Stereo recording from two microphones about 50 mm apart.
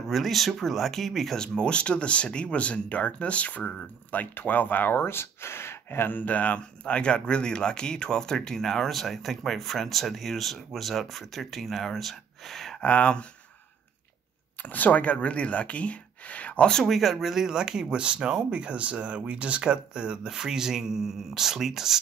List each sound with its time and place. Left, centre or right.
0.1 s speech: centre
1.4 s speech: centre; by 5.0 s left
5.0 s speech: left; by 12.7 s centre
12.8 s speech: left
14.6 s speech: left
16.8 s speech: centre